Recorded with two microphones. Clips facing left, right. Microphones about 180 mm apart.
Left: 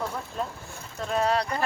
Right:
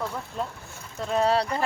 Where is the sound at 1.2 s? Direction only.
30° right (ahead or behind).